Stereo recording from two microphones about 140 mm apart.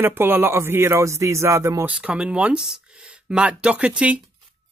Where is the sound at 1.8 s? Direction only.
5° right (ahead or behind).